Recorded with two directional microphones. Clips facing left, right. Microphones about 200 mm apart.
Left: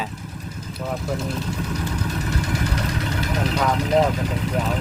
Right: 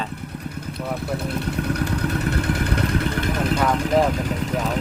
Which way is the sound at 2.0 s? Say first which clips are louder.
Right 3 dB; 60° right (ahead or behind).